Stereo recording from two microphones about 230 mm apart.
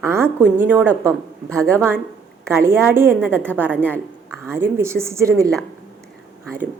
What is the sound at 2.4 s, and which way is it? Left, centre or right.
Speech, centre.